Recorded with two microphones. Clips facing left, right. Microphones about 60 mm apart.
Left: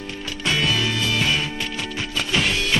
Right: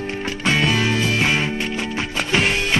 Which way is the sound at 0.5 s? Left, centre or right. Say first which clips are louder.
Right 3 dB; right.